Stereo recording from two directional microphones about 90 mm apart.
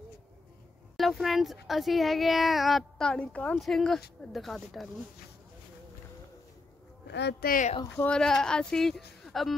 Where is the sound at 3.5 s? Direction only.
Centre (ahead or behind).